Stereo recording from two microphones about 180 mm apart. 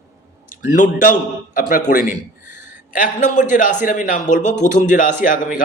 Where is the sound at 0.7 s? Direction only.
45° left (ahead or behind).